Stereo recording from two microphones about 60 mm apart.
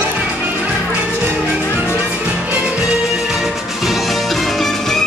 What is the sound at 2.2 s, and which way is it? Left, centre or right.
Music, right.